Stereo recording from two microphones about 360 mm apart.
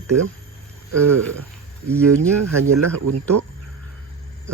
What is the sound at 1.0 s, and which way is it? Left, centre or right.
Speech, right.